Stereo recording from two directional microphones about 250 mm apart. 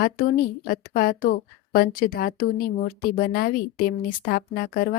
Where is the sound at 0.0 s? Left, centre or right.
Left.